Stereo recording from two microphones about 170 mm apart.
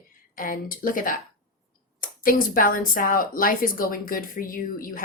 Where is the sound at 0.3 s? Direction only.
55° left (ahead or behind).